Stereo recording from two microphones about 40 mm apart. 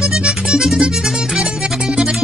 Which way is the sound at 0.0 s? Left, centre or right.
Right.